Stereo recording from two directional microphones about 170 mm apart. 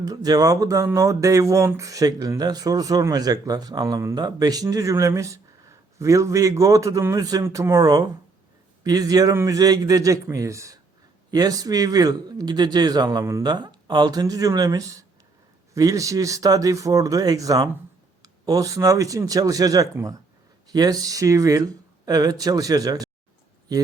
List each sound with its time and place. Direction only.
0.0 s speech: 20° right (ahead or behind)